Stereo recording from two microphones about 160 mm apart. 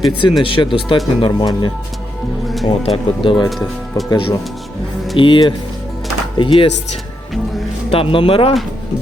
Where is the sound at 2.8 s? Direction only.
35° left (ahead or behind).